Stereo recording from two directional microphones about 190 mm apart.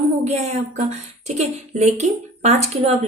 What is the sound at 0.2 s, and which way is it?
Speech, 35° right (ahead or behind).